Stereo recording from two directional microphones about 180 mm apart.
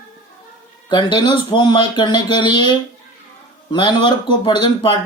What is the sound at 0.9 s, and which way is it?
Speech, 25° left (ahead or behind).